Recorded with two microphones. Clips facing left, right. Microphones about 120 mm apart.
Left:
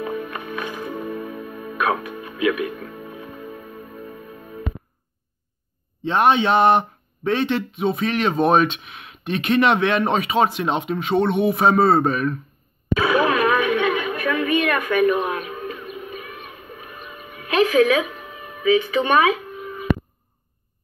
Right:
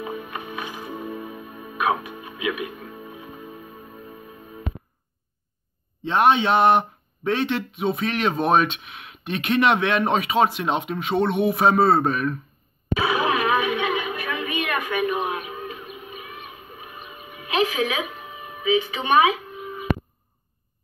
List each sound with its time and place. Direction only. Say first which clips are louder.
0.0 s music: left 4 dB; 55° left (ahead or behind)
6.0 s a man's voice: left 1 dB; centre (ahead or behind)
13.0 s a sound: left 4 dB; 50° left (ahead or behind)